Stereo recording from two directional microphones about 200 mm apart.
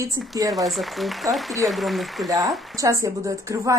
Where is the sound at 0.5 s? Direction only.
Centre (ahead or behind).